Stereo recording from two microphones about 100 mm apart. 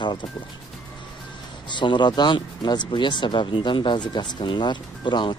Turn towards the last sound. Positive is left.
turn(degrees=50)  # may be behind; listen again after turning